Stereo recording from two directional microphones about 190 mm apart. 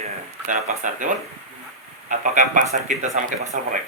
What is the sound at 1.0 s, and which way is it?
Speech, 40° right (ahead or behind).